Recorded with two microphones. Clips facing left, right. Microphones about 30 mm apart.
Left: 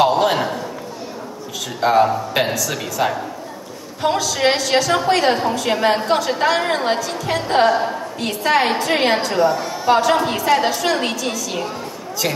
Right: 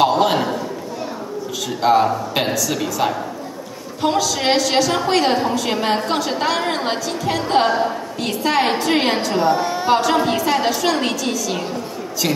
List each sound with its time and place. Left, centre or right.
0.0 s a sound: centre
1.8 s a woman's voice: centre
9.4 s a woman's voice: right
9.9 s a woman's voice: centre